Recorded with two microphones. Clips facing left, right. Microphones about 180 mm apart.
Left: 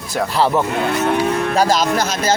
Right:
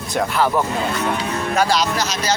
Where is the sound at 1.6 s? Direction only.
45° left (ahead or behind).